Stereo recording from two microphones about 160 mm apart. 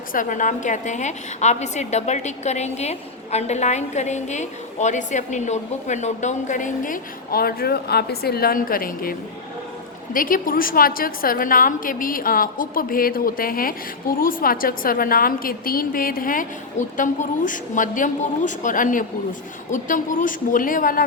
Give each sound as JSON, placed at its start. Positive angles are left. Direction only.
{"t": 0.1, "sound": "a woman's voice", "side_deg": 55}